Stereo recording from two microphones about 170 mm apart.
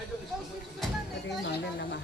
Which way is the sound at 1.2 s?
85° left.